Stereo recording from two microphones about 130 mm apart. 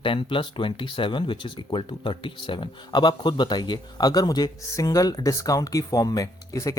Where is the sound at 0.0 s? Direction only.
40° left (ahead or behind).